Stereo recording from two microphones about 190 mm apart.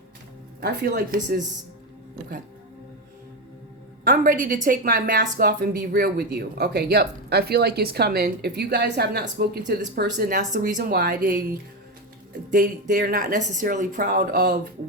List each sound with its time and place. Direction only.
0.6 s speech: 50° right (ahead or behind)
4.0 s a woman's voice: 45° right (ahead or behind)
12.5 s speech: 45° right (ahead or behind)